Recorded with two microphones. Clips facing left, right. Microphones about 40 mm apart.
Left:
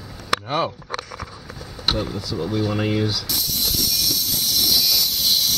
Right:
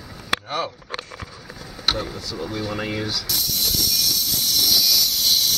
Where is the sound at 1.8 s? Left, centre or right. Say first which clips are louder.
Left 1 dB; centre.